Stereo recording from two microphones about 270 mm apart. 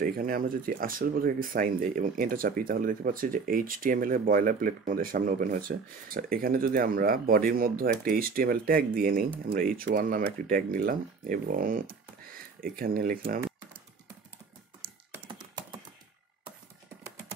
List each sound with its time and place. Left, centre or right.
0.0 s speech: right
14.8 s computer keyboard: centre